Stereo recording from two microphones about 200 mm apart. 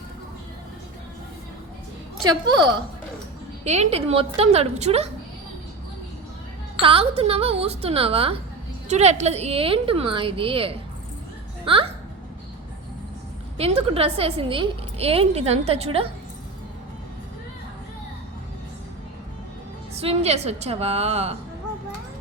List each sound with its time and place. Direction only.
3.6 s a woman's voice: 35° right (ahead or behind)
6.8 s a woman's voice: 30° right (ahead or behind)
13.6 s a woman's voice: 30° right (ahead or behind)
20.0 s a woman's voice: 30° right (ahead or behind)